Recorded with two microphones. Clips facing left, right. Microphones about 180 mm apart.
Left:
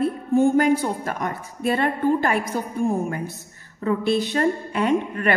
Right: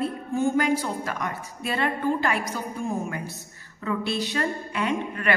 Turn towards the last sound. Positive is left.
turn(degrees=45)  # may be behind; listen again after turning